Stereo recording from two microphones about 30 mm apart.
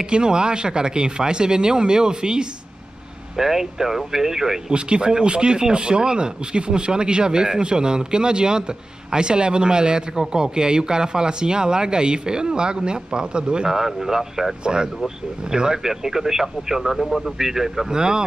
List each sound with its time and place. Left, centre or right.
0.0 s speech: right
3.3 s speech: centre
4.6 s speech: right
13.7 s speech: centre
14.6 s speech: right
17.9 s speech: right